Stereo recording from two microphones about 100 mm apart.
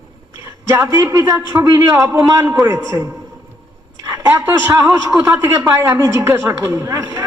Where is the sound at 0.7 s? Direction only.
25° right (ahead or behind).